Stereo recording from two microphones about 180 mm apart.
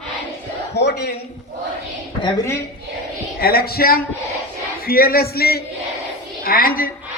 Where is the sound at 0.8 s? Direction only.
70° left (ahead or behind).